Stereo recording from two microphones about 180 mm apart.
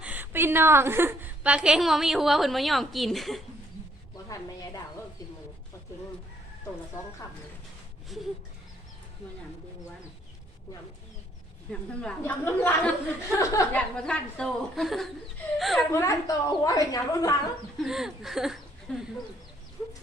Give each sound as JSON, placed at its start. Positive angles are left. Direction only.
{"t": 0.0, "sound": "a woman's voice", "side_deg": -10}
{"t": 4.3, "sound": "a woman's voice", "side_deg": 20}
{"t": 8.1, "sound": "a woman's voice", "side_deg": 0}
{"t": 11.7, "sound": "a woman's voice", "side_deg": 10}
{"t": 13.7, "sound": "a woman's voice", "side_deg": 5}
{"t": 15.9, "sound": "a woman's voice", "side_deg": 15}
{"t": 17.8, "sound": "a woman's voice", "side_deg": 0}
{"t": 19.8, "sound": "a sound", "side_deg": 20}